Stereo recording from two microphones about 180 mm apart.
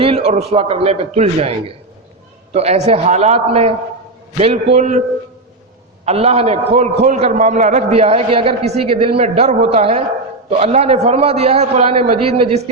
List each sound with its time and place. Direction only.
0.0 s a sound: 30° right (ahead or behind)
0.5 s a man's voice: 35° right (ahead or behind)
6.1 s a man's voice: 35° right (ahead or behind)